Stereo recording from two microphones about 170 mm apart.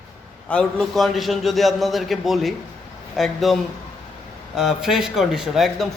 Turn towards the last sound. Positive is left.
turn(degrees=0)  # may be behind; listen again after turning